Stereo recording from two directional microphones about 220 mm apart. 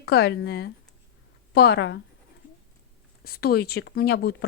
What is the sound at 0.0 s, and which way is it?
A woman's voice, 50° left (ahead or behind).